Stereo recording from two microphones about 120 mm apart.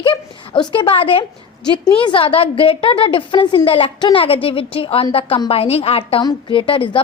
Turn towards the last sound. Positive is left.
turn(degrees=45)  # may be behind; listen again after turning